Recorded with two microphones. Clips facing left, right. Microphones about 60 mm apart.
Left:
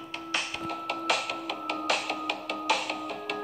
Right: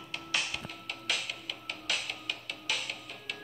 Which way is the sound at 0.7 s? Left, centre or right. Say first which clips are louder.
Left 8 dB; left.